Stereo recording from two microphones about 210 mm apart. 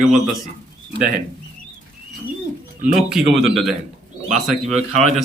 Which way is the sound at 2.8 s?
50° right (ahead or behind).